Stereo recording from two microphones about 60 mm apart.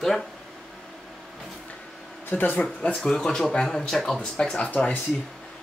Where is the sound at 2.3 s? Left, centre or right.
Left.